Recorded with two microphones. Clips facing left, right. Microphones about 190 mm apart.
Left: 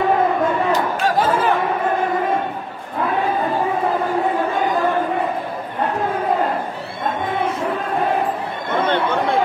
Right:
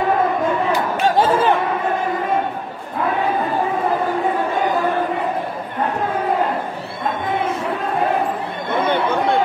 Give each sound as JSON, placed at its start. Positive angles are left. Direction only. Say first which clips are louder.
{"t": 1.0, "sound": "chatter", "louder": "right 4 dB", "side_deg": -25}